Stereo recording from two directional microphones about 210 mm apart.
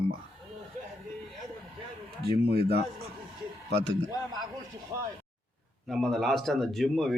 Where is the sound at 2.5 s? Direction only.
50° right (ahead or behind).